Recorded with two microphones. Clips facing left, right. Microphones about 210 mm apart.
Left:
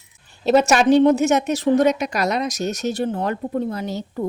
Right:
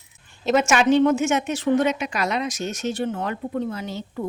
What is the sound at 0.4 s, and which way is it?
A woman's voice, 35° left (ahead or behind).